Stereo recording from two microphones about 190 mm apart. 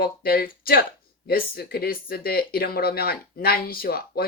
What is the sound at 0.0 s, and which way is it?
Speech, 50° left (ahead or behind).